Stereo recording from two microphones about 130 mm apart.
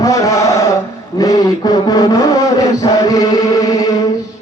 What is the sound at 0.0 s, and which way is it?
Chant, 25° left (ahead or behind).